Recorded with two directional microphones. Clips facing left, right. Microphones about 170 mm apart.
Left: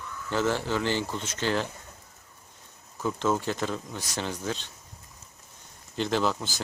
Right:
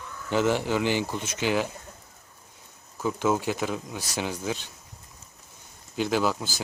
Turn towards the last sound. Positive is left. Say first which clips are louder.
# right 1 dB
turn(degrees=-5)  # may be behind; listen again after turning